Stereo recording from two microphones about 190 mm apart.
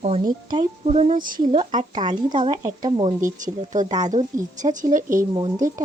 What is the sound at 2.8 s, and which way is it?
Speech, 15° right (ahead or behind).